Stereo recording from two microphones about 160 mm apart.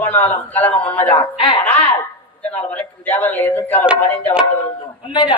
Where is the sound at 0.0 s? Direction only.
10° left (ahead or behind).